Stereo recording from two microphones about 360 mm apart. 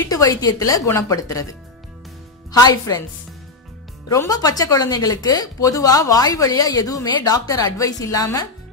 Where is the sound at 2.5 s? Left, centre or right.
Centre.